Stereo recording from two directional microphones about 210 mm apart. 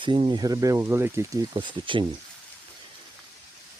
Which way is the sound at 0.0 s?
25° right (ahead or behind).